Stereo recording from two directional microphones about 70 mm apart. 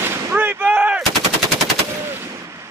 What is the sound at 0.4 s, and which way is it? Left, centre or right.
Artillery fire, right.